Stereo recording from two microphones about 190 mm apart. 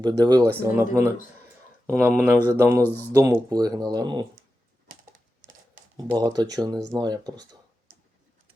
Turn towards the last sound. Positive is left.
turn(degrees=-20)  # may be behind; listen again after turning